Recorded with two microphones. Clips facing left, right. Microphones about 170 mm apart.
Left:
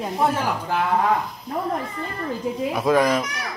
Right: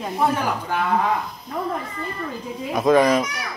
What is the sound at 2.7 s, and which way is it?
Speech, 5° left (ahead or behind).